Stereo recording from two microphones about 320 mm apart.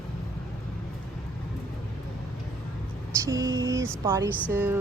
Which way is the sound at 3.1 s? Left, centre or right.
Centre.